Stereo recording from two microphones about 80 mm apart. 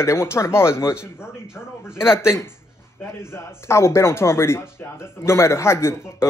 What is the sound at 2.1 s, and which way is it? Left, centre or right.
Speech, left.